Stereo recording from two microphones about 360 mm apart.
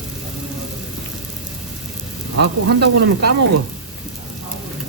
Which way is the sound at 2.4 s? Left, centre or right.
Right.